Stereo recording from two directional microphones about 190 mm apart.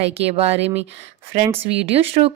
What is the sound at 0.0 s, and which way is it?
Speech, 30° right (ahead or behind).